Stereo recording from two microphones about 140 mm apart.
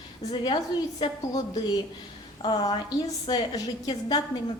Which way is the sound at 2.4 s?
30° left (ahead or behind).